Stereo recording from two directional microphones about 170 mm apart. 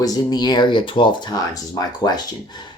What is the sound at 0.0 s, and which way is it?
Speech, 25° left (ahead or behind).